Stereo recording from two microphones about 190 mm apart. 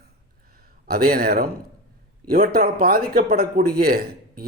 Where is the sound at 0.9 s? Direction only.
50° right (ahead or behind).